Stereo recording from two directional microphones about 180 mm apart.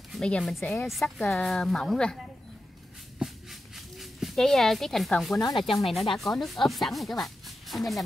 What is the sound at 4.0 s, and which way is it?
Speech, centre (ahead or behind).